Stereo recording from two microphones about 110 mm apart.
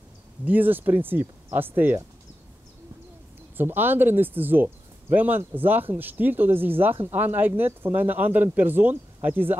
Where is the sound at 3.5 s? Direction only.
20° right (ahead or behind).